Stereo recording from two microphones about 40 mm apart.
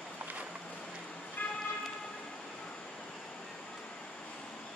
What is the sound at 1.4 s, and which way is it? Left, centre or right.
Vehicle, left.